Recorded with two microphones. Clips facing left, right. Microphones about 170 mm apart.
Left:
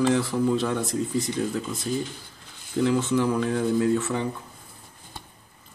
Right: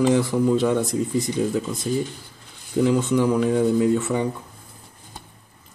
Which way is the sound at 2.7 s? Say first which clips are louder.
Right 3 dB; 10° right (ahead or behind).